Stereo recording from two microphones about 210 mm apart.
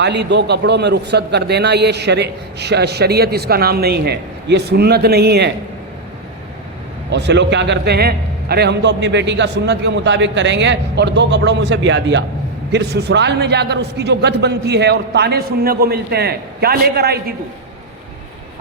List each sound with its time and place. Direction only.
0.0 s a man's voice: 55° right (ahead or behind)
7.1 s a man's voice: 55° right (ahead or behind)